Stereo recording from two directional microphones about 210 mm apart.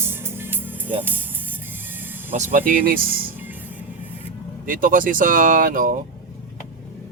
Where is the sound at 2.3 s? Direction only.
35° right (ahead or behind).